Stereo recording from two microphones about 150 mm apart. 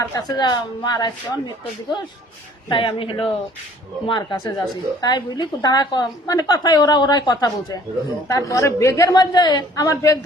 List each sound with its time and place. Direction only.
0.0 s a woman's voice: 25° left (ahead or behind)
2.6 s a woman's voice: 35° left (ahead or behind)